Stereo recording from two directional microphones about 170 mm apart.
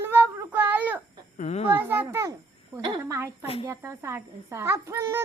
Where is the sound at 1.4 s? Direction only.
40° left (ahead or behind).